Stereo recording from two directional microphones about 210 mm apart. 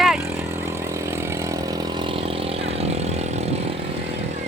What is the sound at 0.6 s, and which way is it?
Vehicle, 10° right (ahead or behind).